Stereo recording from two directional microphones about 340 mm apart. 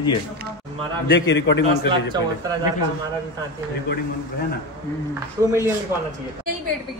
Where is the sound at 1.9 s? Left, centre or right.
Centre.